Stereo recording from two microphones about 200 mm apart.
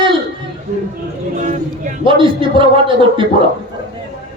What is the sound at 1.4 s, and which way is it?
Speech, 40° right (ahead or behind).